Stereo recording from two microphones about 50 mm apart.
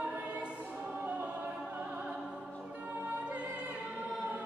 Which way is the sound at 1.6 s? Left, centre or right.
Right.